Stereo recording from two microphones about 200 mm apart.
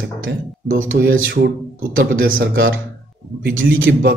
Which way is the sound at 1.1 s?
60° right (ahead or behind).